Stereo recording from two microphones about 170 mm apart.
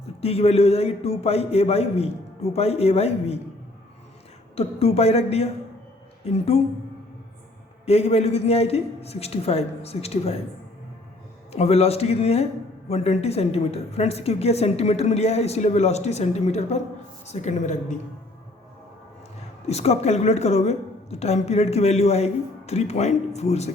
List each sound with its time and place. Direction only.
0.2 s a woman's voice: 35° left (ahead or behind)
4.5 s a woman's voice: 35° left (ahead or behind)
7.9 s a woman's voice: 35° left (ahead or behind)
11.5 s a woman's voice: 35° left (ahead or behind)
19.6 s a woman's voice: 40° left (ahead or behind)